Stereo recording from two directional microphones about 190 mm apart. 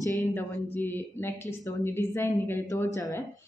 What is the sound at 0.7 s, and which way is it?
A man's voice, 10° left (ahead or behind).